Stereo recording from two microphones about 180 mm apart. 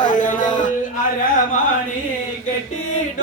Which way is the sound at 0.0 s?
45° left (ahead or behind).